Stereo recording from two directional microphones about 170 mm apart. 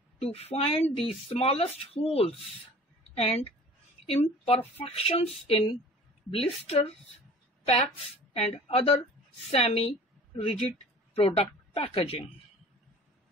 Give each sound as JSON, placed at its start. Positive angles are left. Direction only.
{"t": 0.2, "sound": "a woman's voice", "side_deg": 35}